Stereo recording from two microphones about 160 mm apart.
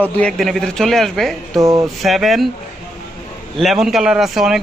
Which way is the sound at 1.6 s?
20° right (ahead or behind).